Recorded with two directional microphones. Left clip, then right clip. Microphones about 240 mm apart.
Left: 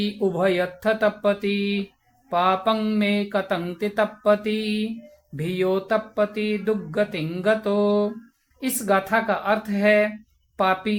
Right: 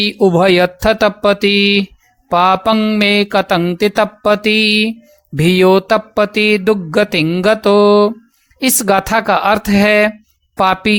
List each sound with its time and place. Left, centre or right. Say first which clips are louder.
0.0 s speech: right 11 dB; right